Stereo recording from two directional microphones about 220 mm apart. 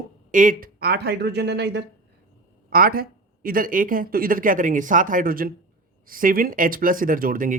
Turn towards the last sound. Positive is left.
turn(degrees=-40)  # may be behind; listen again after turning